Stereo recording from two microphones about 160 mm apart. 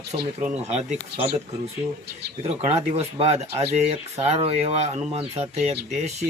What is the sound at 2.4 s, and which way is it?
Speech, 45° right (ahead or behind).